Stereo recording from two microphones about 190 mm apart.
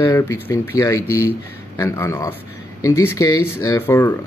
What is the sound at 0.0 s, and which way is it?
Speech, 15° left (ahead or behind).